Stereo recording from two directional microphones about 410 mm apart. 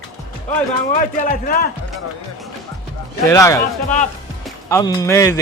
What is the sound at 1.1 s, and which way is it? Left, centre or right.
Speech, centre.